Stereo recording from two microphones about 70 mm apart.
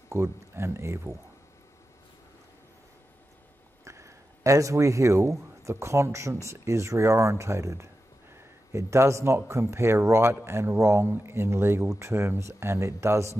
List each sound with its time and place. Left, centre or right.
0.1 s speech: right
3.8 s a sound: right
5.6 s speech: right